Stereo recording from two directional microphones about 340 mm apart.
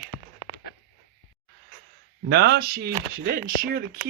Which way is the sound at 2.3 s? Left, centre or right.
Right.